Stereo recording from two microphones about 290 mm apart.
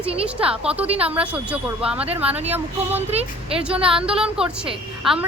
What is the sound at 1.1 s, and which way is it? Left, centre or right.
Speech, centre.